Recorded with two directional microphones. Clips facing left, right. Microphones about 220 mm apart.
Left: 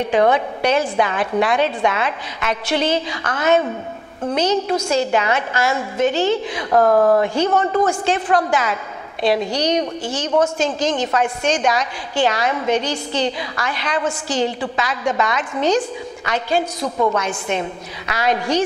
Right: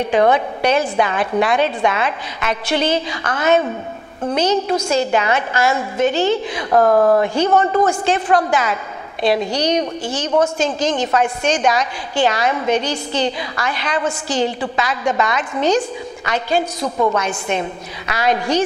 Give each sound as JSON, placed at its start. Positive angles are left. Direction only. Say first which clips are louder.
{"t": 0.1, "sound": "a woman's voice", "louder": "right 1 dB", "side_deg": -15}
{"t": 6.7, "sound": "speech", "louder": "right 1 dB", "side_deg": -30}
{"t": 8.0, "sound": "a woman's voice", "louder": "right 2 dB", "side_deg": -10}
{"t": 11.1, "sound": "a woman's voice", "louder": "right 2 dB", "side_deg": -20}
{"t": 16.8, "sound": "a woman's voice", "louder": "right 1 dB", "side_deg": -30}
{"t": 17.5, "sound": "a woman's voice", "louder": "right 1 dB", "side_deg": -15}